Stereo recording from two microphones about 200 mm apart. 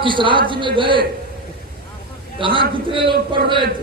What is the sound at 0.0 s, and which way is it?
A man's voice, 25° right (ahead or behind).